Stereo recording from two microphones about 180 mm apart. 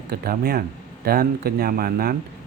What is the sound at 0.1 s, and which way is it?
Speech, 60° right (ahead or behind).